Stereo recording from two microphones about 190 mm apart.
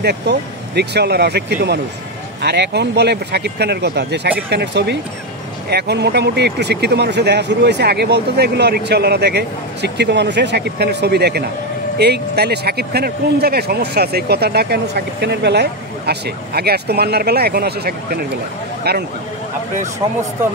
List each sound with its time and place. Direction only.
0.0 s speech: 60° right (ahead or behind)